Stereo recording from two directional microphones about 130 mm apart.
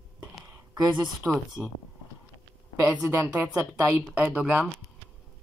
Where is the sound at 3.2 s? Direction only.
15° right (ahead or behind).